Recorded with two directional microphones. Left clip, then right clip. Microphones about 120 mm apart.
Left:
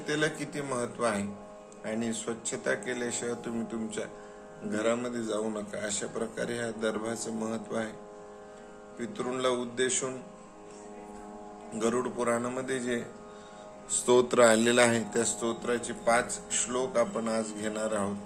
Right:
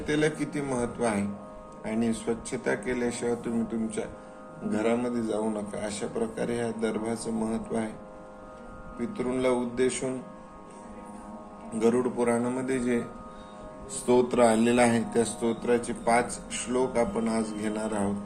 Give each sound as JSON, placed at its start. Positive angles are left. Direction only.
{"t": 0.0, "sound": "a man's voice", "side_deg": 40}
{"t": 9.0, "sound": "a man's voice", "side_deg": 35}
{"t": 11.8, "sound": "a man's voice", "side_deg": 40}
{"t": 13.9, "sound": "a man's voice", "side_deg": 75}